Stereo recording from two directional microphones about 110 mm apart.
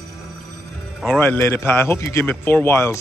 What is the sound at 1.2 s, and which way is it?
Speech, 20° left (ahead or behind).